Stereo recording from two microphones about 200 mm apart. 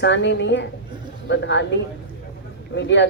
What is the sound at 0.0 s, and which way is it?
A woman's voice, 60° left (ahead or behind).